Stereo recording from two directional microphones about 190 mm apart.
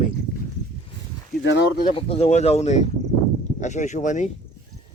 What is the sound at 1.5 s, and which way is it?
Speech, 60° left (ahead or behind).